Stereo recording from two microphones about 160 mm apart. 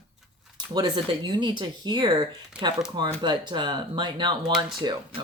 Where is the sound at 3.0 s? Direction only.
30° right (ahead or behind).